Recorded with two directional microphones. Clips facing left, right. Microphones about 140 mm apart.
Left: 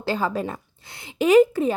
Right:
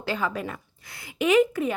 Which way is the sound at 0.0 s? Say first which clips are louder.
Left 4 dB; 35° left (ahead or behind).